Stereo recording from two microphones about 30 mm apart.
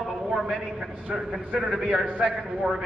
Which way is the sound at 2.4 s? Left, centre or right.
Centre.